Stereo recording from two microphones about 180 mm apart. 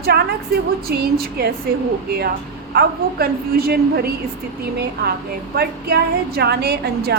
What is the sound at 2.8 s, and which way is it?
A woman's voice, 60° right (ahead or behind).